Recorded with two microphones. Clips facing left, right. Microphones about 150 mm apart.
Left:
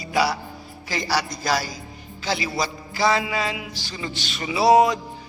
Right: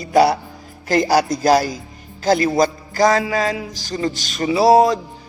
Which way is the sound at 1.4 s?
50° right (ahead or behind).